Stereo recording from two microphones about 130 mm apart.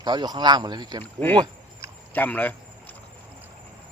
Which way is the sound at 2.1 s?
15° left (ahead or behind).